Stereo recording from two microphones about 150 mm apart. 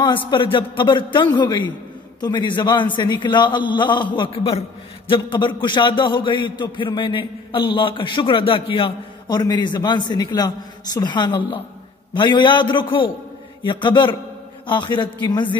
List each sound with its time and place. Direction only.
0.3 s a man's voice: 35° left (ahead or behind)